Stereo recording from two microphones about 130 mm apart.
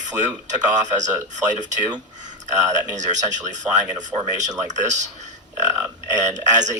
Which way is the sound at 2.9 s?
70° right (ahead or behind).